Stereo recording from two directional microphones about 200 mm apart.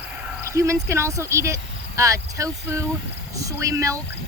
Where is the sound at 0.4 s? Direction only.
15° right (ahead or behind).